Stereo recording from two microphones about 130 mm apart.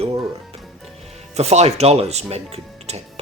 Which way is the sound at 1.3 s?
55° right (ahead or behind).